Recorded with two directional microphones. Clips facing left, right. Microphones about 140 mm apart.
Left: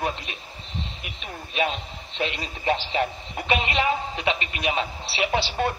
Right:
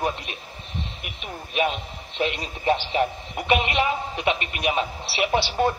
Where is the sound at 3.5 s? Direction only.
55° right (ahead or behind).